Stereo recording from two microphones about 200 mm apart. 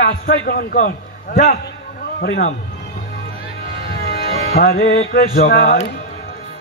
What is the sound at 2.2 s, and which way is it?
Speech, 55° left (ahead or behind).